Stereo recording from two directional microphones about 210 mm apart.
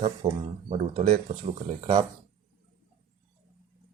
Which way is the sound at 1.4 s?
25° right (ahead or behind).